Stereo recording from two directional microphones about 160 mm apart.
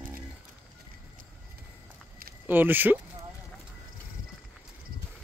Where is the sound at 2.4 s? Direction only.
10° right (ahead or behind).